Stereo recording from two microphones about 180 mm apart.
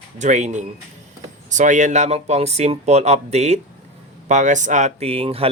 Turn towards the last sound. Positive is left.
turn(degrees=-30)  # may be behind; listen again after turning